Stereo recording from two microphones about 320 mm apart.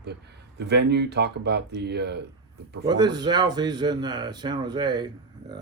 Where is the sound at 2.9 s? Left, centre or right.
Centre.